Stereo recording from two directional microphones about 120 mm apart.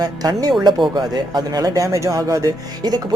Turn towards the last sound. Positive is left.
turn(degrees=-30)  # may be behind; listen again after turning